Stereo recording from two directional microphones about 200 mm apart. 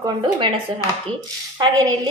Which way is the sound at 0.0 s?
25° right (ahead or behind).